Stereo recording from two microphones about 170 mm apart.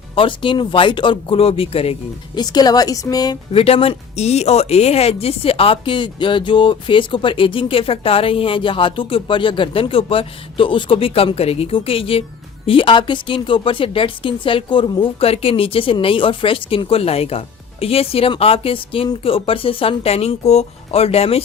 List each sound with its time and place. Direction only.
0.2 s speech: 30° left (ahead or behind)
3.5 s a woman's voice: 35° left (ahead or behind)